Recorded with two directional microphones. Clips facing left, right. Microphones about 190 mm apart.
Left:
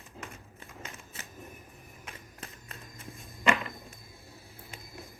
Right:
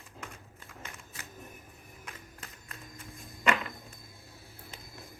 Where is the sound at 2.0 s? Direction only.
30° left (ahead or behind).